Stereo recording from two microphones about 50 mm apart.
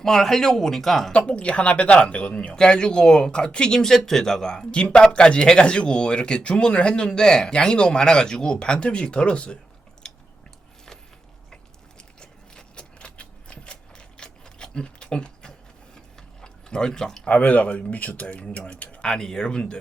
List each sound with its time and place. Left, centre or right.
0.0 s speech: centre
1.3 s speech: left
10.0 s chewing: centre
11.5 s a sound: centre
17.2 s speech: left
19.0 s speech: centre